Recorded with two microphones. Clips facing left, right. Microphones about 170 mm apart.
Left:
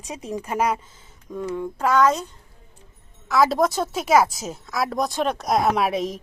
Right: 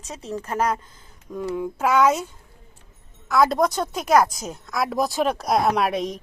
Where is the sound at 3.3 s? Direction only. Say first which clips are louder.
Even; centre (ahead or behind).